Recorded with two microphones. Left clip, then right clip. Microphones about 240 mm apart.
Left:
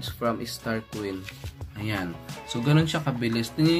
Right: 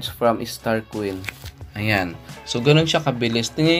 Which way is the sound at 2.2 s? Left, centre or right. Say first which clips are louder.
Right 10 dB; centre.